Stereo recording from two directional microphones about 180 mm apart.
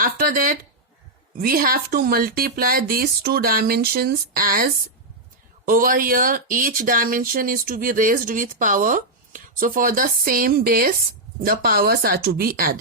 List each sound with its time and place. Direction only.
0.0 s a woman's voice: 50° right (ahead or behind)